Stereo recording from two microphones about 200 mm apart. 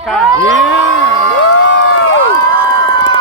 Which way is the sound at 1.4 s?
65° left (ahead or behind).